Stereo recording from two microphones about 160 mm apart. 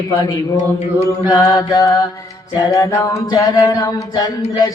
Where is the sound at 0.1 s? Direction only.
15° left (ahead or behind).